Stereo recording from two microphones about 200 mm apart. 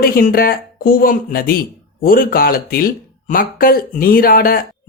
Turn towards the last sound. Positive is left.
turn(degrees=45)  # may be behind; listen again after turning